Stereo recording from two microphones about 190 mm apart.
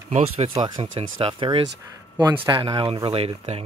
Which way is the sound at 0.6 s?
20° right (ahead or behind).